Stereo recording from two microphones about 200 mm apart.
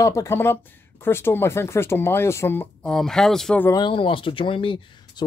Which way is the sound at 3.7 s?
20° left (ahead or behind).